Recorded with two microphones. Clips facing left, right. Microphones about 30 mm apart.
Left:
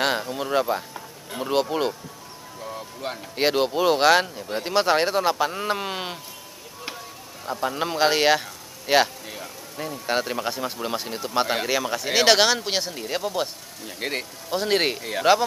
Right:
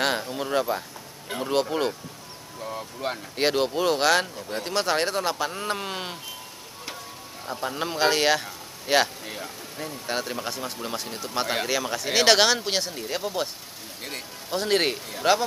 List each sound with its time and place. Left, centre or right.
0.0 s speech: centre
3.3 s speech: centre
7.6 s speech: centre
9.2 s a sound: centre
10.0 s speech: centre
13.9 s speech: left
14.5 s speech: centre